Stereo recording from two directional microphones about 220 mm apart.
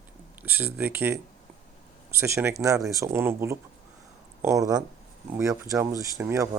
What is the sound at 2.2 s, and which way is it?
Speech, 10° right (ahead or behind).